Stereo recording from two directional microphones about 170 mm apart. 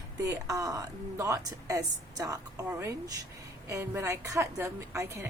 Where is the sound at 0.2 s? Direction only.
20° right (ahead or behind).